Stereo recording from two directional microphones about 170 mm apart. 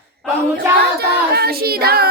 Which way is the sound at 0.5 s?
70° right (ahead or behind).